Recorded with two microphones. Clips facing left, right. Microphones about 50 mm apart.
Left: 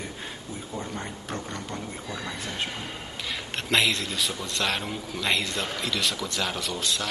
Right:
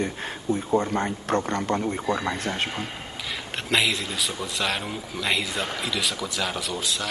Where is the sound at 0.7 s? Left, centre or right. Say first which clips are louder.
Right 9 dB; right.